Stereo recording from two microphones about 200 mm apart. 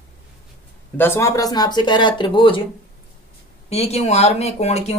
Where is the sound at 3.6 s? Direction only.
30° left (ahead or behind).